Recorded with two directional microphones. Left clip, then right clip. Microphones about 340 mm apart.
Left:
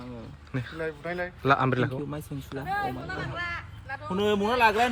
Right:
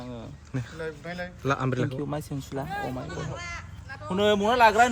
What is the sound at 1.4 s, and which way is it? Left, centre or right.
Speech, centre.